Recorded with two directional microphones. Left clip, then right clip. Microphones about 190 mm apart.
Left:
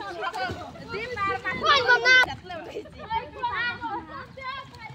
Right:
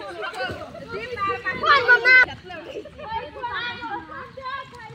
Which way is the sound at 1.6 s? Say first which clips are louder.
Right 4 dB; 40° right (ahead or behind).